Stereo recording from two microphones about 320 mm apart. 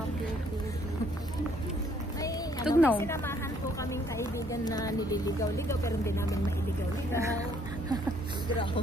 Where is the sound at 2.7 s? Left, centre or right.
Centre.